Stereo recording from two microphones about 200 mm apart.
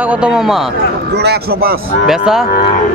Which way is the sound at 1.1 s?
55° right (ahead or behind).